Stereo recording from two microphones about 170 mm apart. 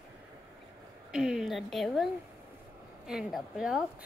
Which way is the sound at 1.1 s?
5° right (ahead or behind).